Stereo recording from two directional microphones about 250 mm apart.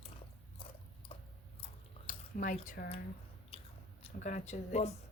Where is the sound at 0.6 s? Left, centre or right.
Left.